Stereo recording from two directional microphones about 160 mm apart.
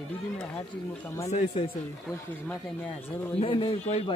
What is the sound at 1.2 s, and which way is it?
Speech, 40° left (ahead or behind).